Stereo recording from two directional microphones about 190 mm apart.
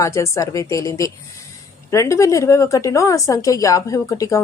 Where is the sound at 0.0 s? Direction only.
15° left (ahead or behind).